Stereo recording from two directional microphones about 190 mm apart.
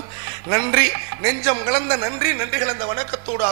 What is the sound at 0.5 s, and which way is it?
A man's voice, 20° right (ahead or behind).